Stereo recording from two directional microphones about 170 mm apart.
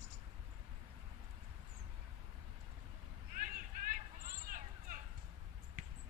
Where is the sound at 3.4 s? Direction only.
55° right (ahead or behind).